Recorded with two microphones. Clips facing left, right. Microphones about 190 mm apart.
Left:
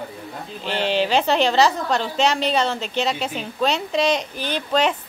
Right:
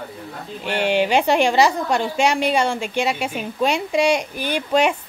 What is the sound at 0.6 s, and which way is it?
Speech, 10° right (ahead or behind).